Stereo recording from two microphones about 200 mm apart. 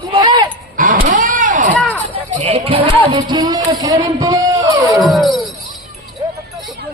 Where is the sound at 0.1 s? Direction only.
25° right (ahead or behind).